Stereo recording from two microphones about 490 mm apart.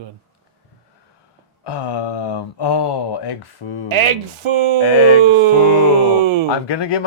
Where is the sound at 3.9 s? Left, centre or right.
Right.